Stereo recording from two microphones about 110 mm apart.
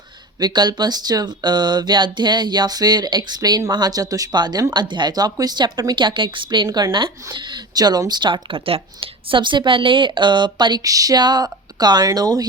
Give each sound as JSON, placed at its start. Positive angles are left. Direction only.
{"t": 0.3, "sound": "speech", "side_deg": -40}